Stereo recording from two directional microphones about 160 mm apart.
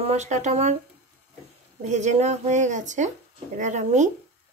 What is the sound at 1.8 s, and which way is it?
Speech, 45° right (ahead or behind).